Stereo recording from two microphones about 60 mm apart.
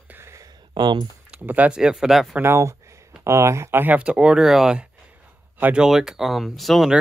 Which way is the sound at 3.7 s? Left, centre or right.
Right.